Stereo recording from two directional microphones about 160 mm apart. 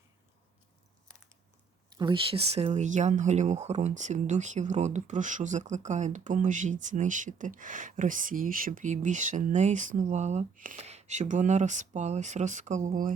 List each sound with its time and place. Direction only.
2.0 s speech: 30° right (ahead or behind); by 13.1 s 55° right (ahead or behind)